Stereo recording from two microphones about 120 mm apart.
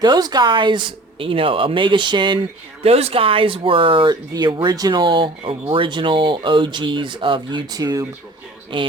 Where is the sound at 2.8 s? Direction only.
55° right (ahead or behind).